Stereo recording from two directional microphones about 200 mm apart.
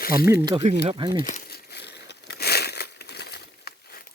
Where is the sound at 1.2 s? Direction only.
45° left (ahead or behind).